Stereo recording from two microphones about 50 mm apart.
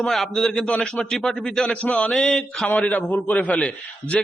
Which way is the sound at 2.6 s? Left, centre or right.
Left.